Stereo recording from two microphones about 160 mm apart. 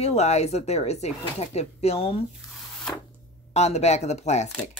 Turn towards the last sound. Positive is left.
turn(degrees=45)  # may be behind; listen again after turning